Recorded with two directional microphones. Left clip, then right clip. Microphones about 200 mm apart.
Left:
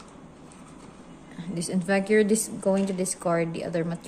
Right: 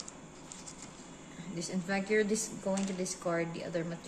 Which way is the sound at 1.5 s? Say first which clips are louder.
Left 10 dB; 60° left (ahead or behind).